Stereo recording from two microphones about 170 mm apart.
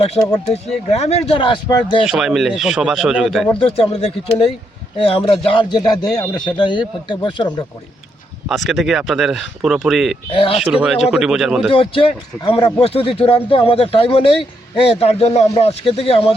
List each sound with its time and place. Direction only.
0.2 s speech: 25° left (ahead or behind)
0.5 s a man's voice: 40° left (ahead or behind)
1.3 s speech: 30° left (ahead or behind)
2.0 s speech: 5° right (ahead or behind)
3.6 s a man's voice: 35° left (ahead or behind)
8.4 s speech: centre (ahead or behind)
10.3 s a man's voice: 30° left (ahead or behind)
10.6 s speech: 5° right (ahead or behind)
11.7 s a man's voice: 30° left (ahead or behind)